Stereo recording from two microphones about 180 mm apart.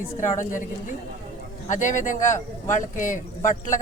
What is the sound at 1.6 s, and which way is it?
A man's voice, 45° left (ahead or behind).